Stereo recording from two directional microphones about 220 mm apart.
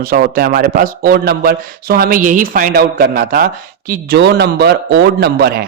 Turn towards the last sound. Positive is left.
turn(degrees=-45)  # may be behind; listen again after turning